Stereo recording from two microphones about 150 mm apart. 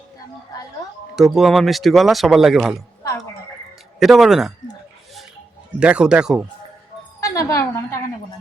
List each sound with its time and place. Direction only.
1.1 s speech: centre (ahead or behind)
4.0 s speech: centre (ahead or behind)
5.8 s speech: 5° right (ahead or behind)
7.2 s a woman's voice: 20° left (ahead or behind)